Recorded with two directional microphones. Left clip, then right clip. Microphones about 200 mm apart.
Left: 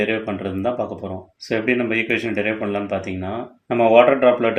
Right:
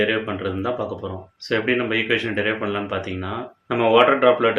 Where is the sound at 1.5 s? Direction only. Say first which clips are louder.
Left 1 dB; 35° left (ahead or behind).